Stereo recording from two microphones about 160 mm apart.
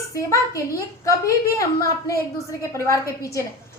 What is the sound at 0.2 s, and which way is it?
A woman's voice, 20° left (ahead or behind).